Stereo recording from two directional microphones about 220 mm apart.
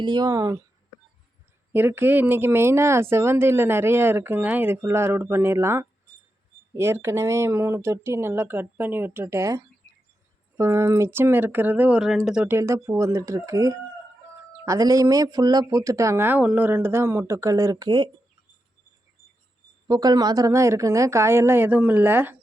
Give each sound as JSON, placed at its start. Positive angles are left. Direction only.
{"t": 0.0, "sound": "speech", "side_deg": -20}
{"t": 1.7, "sound": "speech", "side_deg": -10}
{"t": 19.9, "sound": "speech", "side_deg": -15}